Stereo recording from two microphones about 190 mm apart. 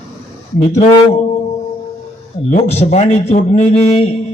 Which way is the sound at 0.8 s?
35° left (ahead or behind).